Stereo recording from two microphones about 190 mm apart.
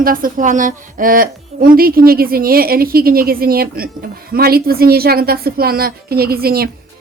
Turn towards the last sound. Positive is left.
turn(degrees=-55)  # may be behind; listen again after turning